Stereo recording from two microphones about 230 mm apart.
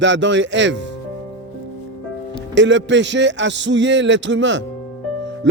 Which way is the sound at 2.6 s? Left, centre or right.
Right.